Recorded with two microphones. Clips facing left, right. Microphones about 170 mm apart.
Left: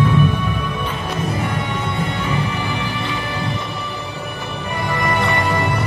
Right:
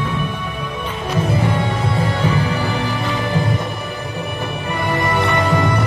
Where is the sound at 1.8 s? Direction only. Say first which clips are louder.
Right 4 dB; 35° right (ahead or behind).